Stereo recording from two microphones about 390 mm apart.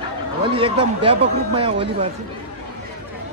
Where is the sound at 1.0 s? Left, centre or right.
Centre.